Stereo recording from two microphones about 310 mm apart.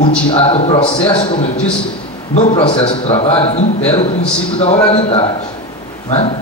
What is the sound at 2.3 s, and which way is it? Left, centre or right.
A man's voice, centre.